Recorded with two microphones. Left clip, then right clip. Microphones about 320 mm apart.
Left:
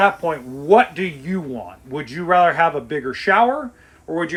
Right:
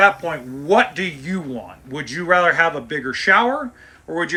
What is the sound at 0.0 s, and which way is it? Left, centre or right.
Speech, centre.